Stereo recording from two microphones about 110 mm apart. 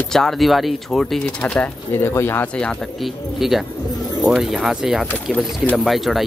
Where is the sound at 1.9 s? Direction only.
20° left (ahead or behind).